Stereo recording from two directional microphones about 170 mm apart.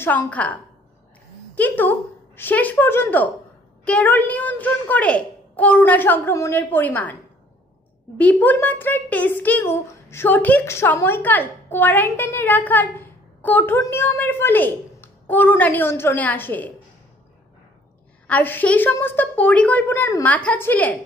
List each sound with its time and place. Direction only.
0.0 s speech: 10° left (ahead or behind)
8.2 s speech: 10° left (ahead or behind)
18.2 s speech: 10° left (ahead or behind)